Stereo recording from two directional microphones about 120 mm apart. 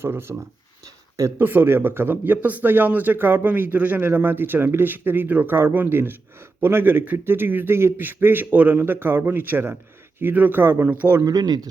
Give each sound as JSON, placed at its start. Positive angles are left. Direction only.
{"t": 0.0, "sound": "speech", "side_deg": -20}
{"t": 11.2, "sound": "speech", "side_deg": -30}